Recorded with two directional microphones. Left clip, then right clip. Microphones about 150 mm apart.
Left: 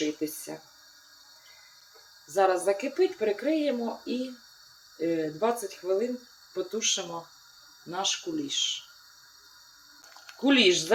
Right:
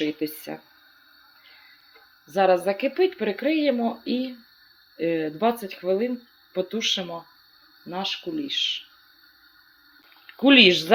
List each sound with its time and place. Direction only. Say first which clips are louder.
0.2 s speech: right 4 dB; 55° right (ahead or behind)
2.3 s speech: right 4 dB; 50° right (ahead or behind)
6.5 s speech: right 4 dB; 45° right (ahead or behind)
10.4 s speech: right 7 dB; 50° right (ahead or behind)